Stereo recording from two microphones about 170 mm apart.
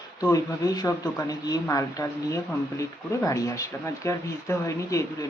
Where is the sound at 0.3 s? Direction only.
20° left (ahead or behind).